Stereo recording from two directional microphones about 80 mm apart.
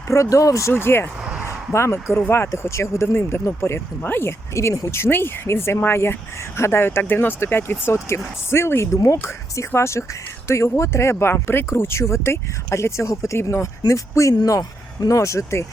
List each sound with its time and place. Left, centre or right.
0.1 s speech: left
0.7 s speech: left
1.2 s a sound: centre
1.7 s speech: left
4.9 s speech: left